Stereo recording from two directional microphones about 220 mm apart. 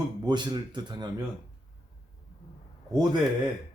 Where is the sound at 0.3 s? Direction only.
20° right (ahead or behind).